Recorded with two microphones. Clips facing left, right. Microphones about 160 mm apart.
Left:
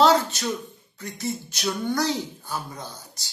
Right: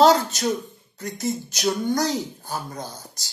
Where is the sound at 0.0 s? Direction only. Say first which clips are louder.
Right 2 dB; 40° right (ahead or behind).